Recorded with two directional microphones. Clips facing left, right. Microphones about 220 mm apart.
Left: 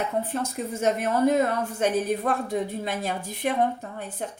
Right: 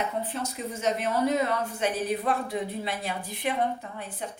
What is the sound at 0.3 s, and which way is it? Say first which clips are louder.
A woman's voice: left 4 dB; 50° left (ahead or behind).